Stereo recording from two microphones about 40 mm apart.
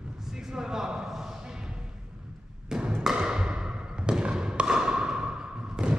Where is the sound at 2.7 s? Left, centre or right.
Centre.